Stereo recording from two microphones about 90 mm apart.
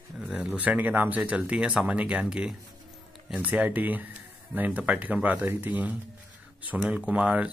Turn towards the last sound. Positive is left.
turn(degrees=-15)  # may be behind; listen again after turning